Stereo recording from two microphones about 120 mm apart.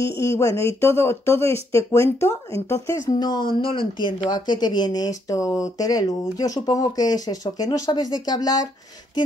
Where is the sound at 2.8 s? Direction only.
35° left (ahead or behind).